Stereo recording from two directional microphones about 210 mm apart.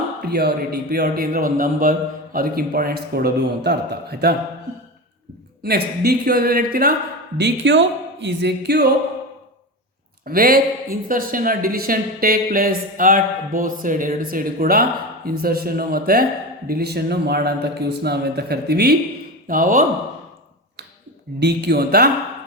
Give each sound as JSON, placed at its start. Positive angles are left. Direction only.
{"t": 0.2, "sound": "speech", "side_deg": -50}
{"t": 5.6, "sound": "speech", "side_deg": -50}
{"t": 7.3, "sound": "speech", "side_deg": -55}
{"t": 10.2, "sound": "speech", "side_deg": -45}
{"t": 21.3, "sound": "speech", "side_deg": -50}